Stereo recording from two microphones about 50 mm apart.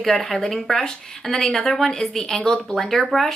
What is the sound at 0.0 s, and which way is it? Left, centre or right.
Speech, centre.